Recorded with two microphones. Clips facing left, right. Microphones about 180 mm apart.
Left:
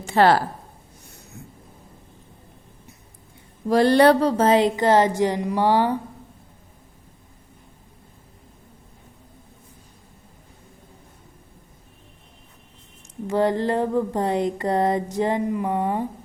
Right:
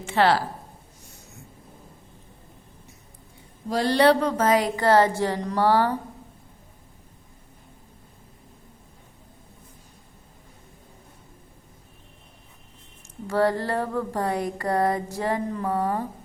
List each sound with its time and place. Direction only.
0.0 s speech: 40° left (ahead or behind)
3.7 s speech: 55° left (ahead or behind)
4.2 s a woman's voice: 30° left (ahead or behind)
13.2 s a sound: 20° left (ahead or behind)